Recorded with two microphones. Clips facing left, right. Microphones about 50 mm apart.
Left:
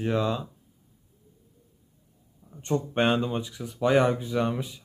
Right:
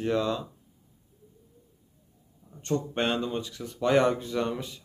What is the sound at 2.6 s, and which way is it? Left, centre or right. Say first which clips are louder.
Speech: left 3 dB; centre.